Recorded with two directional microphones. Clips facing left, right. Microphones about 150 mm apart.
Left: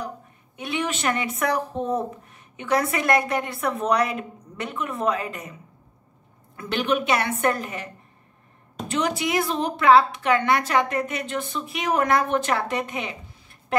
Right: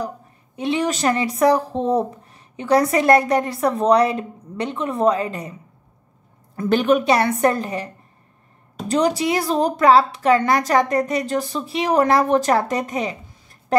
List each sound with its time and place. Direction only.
0.6 s a woman's voice: 30° right (ahead or behind)
6.5 s a woman's voice: 40° right (ahead or behind)